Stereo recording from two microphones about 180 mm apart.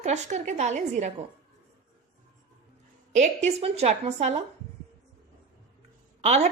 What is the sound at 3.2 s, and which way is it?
A woman's voice, 35° right (ahead or behind).